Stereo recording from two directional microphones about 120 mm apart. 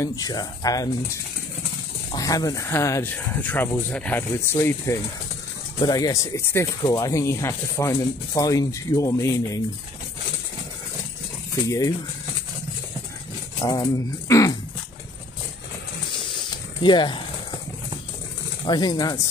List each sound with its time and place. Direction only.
0.0 s speech: 30° left (ahead or behind)
2.1 s speech: 30° left (ahead or behind); by 4.2 s 10° left (ahead or behind)
4.5 s speech: 20° left (ahead or behind)
11.6 s speech: 30° left (ahead or behind)
13.6 s speech: 35° left (ahead or behind)
16.8 s speech: 40° left (ahead or behind)
18.7 s speech: 35° left (ahead or behind)